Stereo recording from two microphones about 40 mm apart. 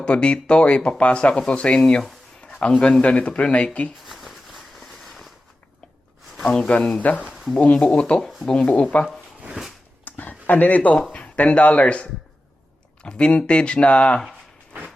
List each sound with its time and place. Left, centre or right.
0.0 s speech: left
2.4 s a sound: left
3.0 s speech: left
4.0 s a sound: centre
6.7 s speech: left
7.1 s speech: left
7.6 s speech: left
10.0 s a sound: left
11.1 s speech: left